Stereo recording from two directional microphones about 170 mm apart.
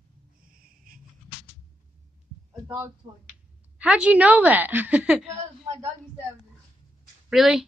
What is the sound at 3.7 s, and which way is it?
A woman's voice, 5° right (ahead or behind).